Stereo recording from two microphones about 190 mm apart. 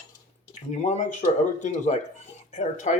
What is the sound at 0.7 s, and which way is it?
Speech, 35° left (ahead or behind).